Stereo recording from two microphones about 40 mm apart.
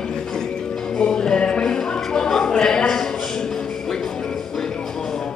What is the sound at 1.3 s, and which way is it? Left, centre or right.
Music, left.